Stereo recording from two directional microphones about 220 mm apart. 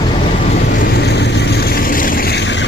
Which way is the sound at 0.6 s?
45° left (ahead or behind).